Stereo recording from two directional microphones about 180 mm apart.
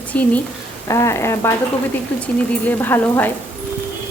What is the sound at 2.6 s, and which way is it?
Speech, 10° left (ahead or behind).